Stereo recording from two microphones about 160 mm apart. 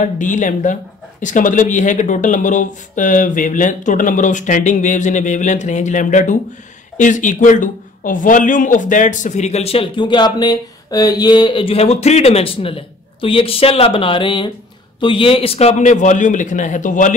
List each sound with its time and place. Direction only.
0.0 s a man's voice: 50° left (ahead or behind)